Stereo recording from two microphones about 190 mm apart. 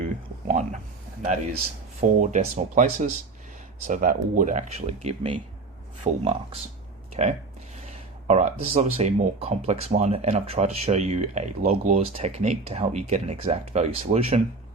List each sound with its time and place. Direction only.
0.0 s a sound: 40° right (ahead or behind)
2.0 s speech: 40° right (ahead or behind)
5.0 s speech: 30° right (ahead or behind)